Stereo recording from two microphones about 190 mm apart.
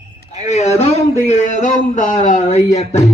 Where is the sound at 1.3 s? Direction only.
40° left (ahead or behind).